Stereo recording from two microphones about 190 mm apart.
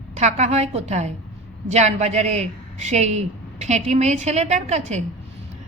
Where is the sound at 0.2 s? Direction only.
35° right (ahead or behind).